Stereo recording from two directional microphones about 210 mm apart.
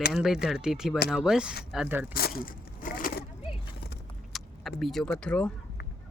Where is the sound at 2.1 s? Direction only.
45° left (ahead or behind).